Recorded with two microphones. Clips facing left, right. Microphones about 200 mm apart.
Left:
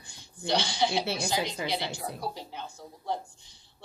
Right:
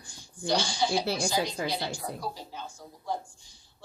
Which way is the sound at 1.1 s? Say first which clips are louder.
Right 2 dB; 20° left (ahead or behind).